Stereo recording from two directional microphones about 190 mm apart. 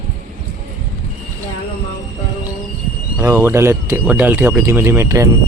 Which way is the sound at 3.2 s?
15° right (ahead or behind).